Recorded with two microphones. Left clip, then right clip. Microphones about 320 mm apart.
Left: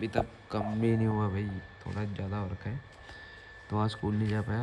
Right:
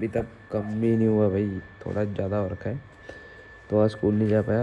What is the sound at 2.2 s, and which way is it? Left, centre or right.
Speech, right.